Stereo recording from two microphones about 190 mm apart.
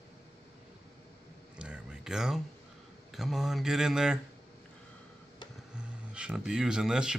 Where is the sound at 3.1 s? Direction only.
Centre (ahead or behind).